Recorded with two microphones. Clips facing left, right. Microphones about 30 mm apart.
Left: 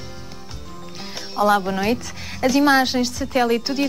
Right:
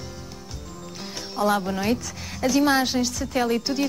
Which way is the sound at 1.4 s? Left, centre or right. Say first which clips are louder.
Left 4 dB; centre.